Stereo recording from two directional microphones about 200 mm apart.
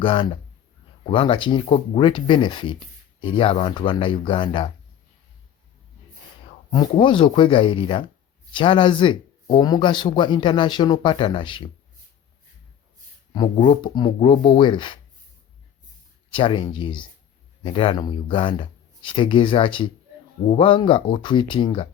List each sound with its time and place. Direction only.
0.0 s speech: 25° left (ahead or behind)
7.0 s speech: 25° left (ahead or behind)
13.3 s speech: 25° left (ahead or behind)
16.3 s speech: 25° left (ahead or behind)